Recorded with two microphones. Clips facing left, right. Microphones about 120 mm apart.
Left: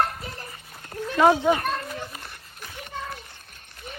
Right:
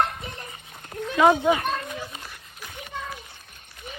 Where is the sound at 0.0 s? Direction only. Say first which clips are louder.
Even; centre (ahead or behind).